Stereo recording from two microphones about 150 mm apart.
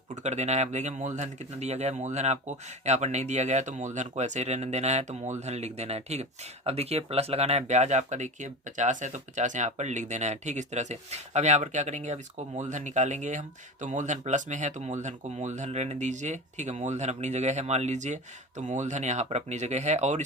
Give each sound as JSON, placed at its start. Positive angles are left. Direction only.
{"t": 0.2, "sound": "speech", "side_deg": -50}